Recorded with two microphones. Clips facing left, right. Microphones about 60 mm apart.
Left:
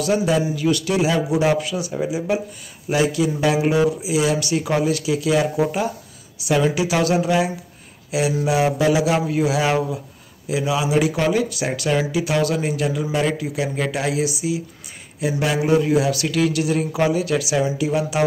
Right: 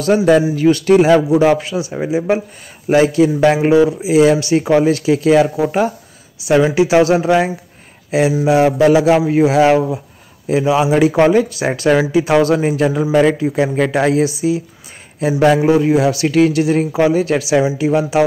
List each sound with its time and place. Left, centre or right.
0.0 s a man's voice: right
1.3 s speech: right
6.7 s speech: right
13.1 s a man's voice: right
13.4 s a man's voice: right
15.6 s speech: right